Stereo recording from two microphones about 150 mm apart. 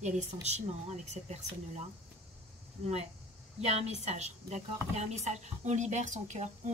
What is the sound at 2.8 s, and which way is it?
Speech, 45° right (ahead or behind).